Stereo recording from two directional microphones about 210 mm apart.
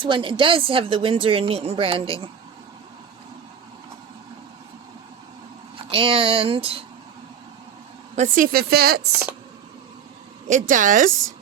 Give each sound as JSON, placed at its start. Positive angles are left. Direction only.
{"t": 0.0, "sound": "a woman's voice", "side_deg": -25}
{"t": 5.7, "sound": "speech", "side_deg": -25}
{"t": 8.1, "sound": "speech", "side_deg": -35}
{"t": 8.5, "sound": "speech", "side_deg": -45}
{"t": 10.5, "sound": "speech", "side_deg": -40}